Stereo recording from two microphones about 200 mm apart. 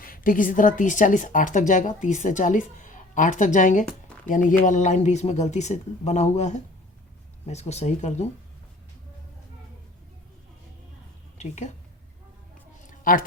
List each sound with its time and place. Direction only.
0.0 s a woman's voice: 45° left (ahead or behind)
11.3 s a woman's voice: 35° left (ahead or behind)
12.8 s a sound: 40° left (ahead or behind)